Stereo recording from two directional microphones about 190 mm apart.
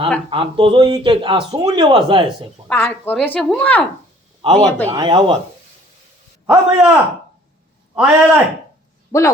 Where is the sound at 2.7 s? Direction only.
10° left (ahead or behind).